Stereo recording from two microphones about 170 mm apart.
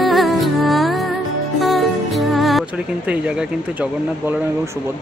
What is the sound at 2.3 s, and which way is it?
Music, centre (ahead or behind).